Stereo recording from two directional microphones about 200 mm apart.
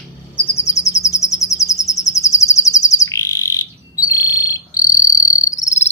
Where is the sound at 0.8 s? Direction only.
35° left (ahead or behind).